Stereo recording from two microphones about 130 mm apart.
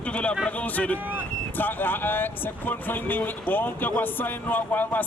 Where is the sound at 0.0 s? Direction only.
10° left (ahead or behind).